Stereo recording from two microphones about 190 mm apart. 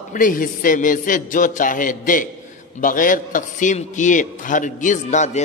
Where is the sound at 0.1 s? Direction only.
45° left (ahead or behind).